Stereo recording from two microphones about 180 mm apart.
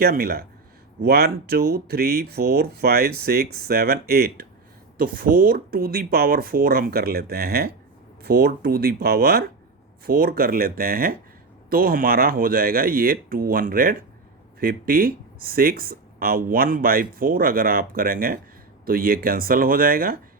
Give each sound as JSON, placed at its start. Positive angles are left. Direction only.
{"t": 0.0, "sound": "speech", "side_deg": -55}